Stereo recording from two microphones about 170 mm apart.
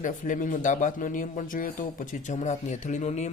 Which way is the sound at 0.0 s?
50° left (ahead or behind).